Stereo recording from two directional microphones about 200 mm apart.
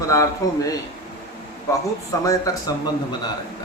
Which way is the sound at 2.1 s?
15° left (ahead or behind).